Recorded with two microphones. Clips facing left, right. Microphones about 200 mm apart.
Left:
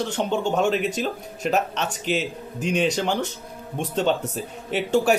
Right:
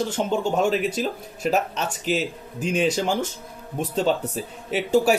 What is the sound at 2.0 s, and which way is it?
Speech, 40° right (ahead or behind).